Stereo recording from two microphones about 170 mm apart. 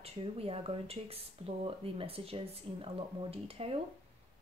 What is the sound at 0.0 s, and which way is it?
Speech, 35° right (ahead or behind).